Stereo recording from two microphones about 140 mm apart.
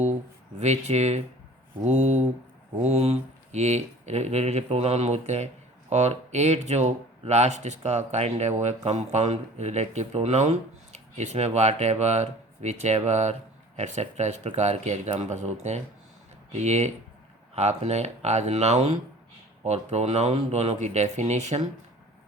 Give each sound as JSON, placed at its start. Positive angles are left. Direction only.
{"t": 0.6, "sound": "speech", "side_deg": -50}